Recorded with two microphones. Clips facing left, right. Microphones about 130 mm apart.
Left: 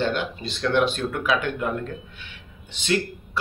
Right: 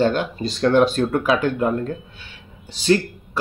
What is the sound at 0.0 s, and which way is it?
Speech, 40° right (ahead or behind).